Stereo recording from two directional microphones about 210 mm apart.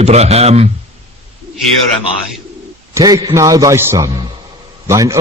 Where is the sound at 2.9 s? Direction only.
20° right (ahead or behind).